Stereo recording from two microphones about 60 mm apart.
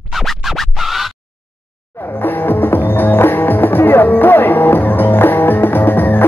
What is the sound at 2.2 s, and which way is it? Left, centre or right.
Music, left.